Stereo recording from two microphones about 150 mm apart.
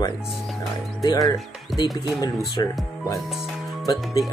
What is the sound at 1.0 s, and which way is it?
Speech, 25° left (ahead or behind).